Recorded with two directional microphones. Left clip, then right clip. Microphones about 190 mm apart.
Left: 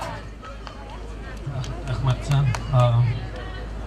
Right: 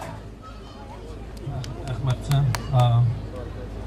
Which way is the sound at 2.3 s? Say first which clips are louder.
Right 1 dB; 10° left (ahead or behind).